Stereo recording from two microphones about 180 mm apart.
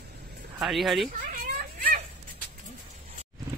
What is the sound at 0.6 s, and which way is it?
Speech, centre (ahead or behind).